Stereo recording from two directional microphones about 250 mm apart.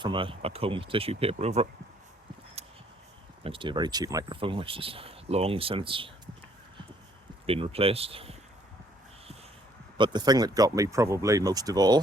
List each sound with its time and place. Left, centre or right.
0.0 s speech: centre
2.6 s a sound: right
3.4 s speech: centre
7.4 s speech: right
10.0 s speech: centre